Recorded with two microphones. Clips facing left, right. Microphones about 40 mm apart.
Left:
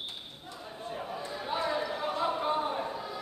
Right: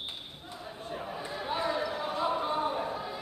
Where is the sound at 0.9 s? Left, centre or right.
Centre.